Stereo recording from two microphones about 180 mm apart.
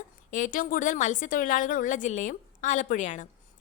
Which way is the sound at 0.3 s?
45° left (ahead or behind).